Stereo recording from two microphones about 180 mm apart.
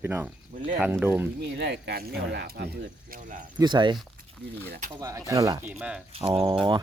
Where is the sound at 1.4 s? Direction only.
70° right (ahead or behind); by 3.4 s 45° right (ahead or behind).